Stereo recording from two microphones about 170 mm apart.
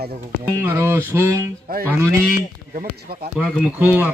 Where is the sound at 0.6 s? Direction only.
15° right (ahead or behind).